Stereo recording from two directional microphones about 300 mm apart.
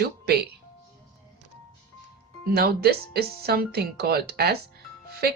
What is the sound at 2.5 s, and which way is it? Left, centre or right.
Speech, right.